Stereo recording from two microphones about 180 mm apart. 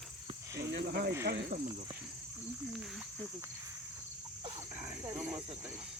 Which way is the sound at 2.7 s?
Centre (ahead or behind).